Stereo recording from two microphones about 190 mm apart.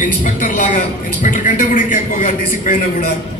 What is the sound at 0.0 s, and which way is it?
A man's voice, 45° left (ahead or behind).